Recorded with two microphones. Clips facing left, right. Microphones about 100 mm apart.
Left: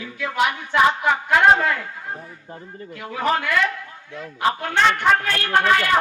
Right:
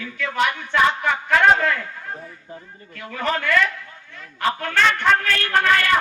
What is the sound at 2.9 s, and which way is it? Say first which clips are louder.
A man's voice: left 2 dB; 10° left (ahead or behind).